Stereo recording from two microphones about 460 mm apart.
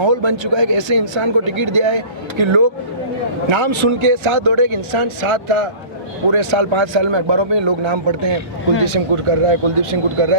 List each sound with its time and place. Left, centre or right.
0.0 s speech: right
6.3 s speech: right
8.8 s speech: right